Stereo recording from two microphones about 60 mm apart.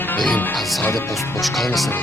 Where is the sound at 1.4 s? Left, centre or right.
Centre.